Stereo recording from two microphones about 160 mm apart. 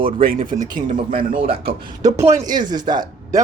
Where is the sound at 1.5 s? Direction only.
35° right (ahead or behind).